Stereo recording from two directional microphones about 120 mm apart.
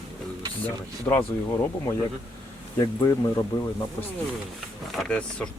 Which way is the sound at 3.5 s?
30° left (ahead or behind).